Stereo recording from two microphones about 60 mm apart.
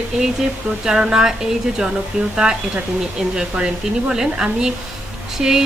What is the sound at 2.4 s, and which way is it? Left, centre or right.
Speech, right.